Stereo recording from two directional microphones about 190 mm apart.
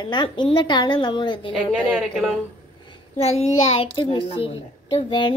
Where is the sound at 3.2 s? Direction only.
35° left (ahead or behind).